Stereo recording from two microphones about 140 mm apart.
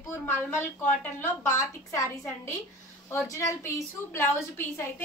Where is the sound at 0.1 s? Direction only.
15° left (ahead or behind).